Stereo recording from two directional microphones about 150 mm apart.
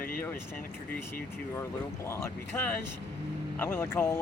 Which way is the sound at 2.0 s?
15° left (ahead or behind).